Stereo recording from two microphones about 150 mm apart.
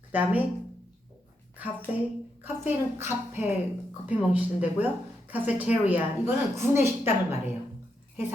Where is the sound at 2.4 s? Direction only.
15° right (ahead or behind).